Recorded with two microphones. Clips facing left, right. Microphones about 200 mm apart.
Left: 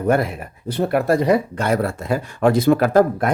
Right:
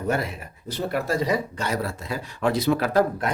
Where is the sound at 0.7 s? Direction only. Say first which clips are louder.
Left 8 dB; 60° left (ahead or behind).